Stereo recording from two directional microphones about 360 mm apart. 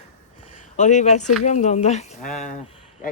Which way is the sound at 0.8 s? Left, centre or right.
Centre.